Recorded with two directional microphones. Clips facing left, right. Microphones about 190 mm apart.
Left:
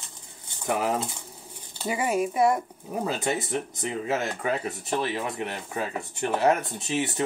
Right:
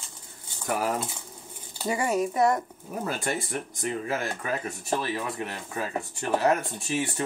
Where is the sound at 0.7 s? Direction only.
20° left (ahead or behind).